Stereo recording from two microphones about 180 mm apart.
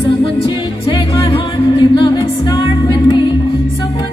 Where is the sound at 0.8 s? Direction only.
25° left (ahead or behind).